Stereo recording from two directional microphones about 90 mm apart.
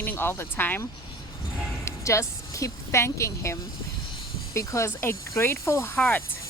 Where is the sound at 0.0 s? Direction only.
25° left (ahead or behind).